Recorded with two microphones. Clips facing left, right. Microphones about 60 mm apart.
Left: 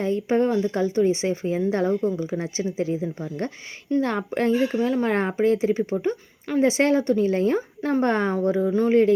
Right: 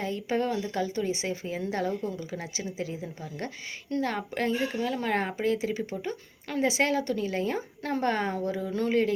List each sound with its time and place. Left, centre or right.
0.0 s speech: left
7.8 s speech: left
8.0 s speech: left
8.7 s speech: left